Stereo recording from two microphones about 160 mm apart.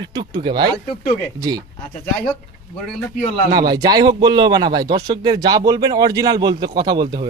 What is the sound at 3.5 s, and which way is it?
Speech, 25° right (ahead or behind).